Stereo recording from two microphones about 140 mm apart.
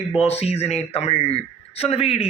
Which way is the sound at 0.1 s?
45° left (ahead or behind).